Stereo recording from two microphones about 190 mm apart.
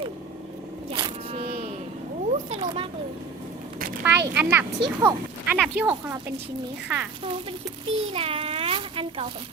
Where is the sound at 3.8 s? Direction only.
50° right (ahead or behind).